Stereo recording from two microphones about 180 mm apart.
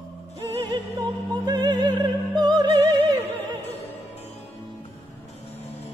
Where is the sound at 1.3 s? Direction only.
25° right (ahead or behind).